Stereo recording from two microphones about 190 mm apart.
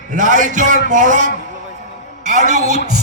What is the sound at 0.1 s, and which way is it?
A man's voice, 40° right (ahead or behind).